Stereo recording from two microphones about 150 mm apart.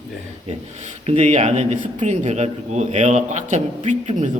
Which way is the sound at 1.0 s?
50° right (ahead or behind).